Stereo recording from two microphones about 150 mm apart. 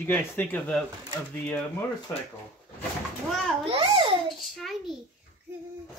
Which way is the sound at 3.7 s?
35° right (ahead or behind).